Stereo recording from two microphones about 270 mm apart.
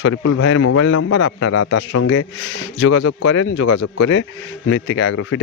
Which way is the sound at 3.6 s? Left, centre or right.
Left.